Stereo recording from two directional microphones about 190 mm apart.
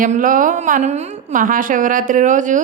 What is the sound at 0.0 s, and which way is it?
A woman's voice, 45° right (ahead or behind).